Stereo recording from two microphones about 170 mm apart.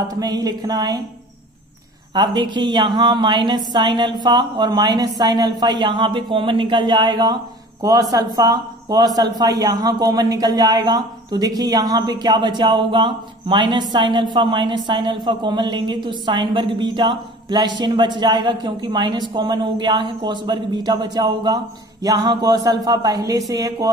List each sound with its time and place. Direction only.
0.1 s speech: 25° right (ahead or behind)
2.1 s speech: 25° right (ahead or behind)